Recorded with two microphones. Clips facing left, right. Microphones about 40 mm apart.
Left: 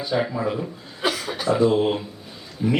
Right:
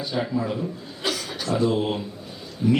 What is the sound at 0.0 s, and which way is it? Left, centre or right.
Speech, centre.